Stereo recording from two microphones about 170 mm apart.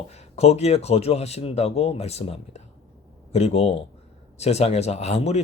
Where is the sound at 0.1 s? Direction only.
40° left (ahead or behind).